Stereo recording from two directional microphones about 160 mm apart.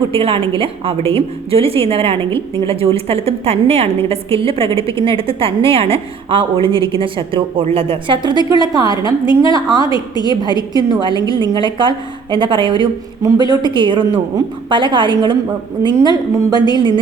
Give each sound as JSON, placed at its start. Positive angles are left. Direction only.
{"t": 0.1, "sound": "a woman's voice", "side_deg": -35}
{"t": 9.9, "sound": "a woman's voice", "side_deg": 25}
{"t": 10.9, "sound": "a woman's voice", "side_deg": -30}